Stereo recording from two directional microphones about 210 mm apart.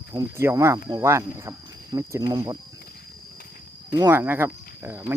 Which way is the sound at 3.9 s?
10° right (ahead or behind).